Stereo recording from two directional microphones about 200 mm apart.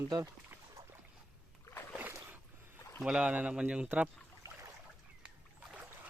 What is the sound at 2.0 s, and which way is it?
Boat, 10° right (ahead or behind).